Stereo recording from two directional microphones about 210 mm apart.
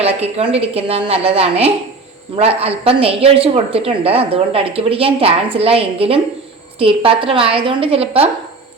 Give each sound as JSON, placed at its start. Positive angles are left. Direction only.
{"t": 0.0, "sound": "a woman's voice", "side_deg": -30}